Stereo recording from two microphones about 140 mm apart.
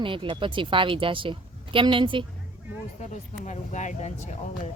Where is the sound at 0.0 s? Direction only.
40° right (ahead or behind).